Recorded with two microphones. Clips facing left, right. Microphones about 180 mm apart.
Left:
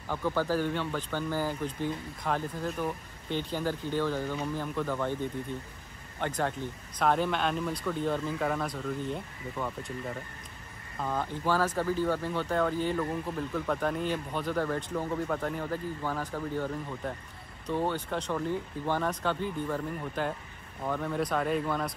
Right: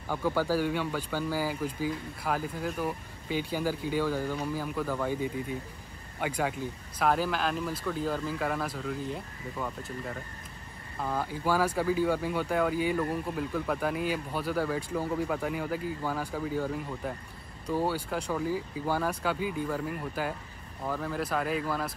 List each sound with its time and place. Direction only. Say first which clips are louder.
0.1 s speech: right 1 dB; 10° right (ahead or behind)